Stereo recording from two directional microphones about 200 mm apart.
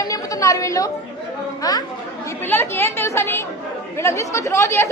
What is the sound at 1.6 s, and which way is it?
A woman's voice, 20° left (ahead or behind).